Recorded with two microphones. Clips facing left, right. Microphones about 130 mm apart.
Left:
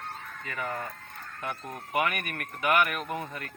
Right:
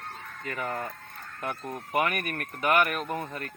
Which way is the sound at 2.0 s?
40° right (ahead or behind).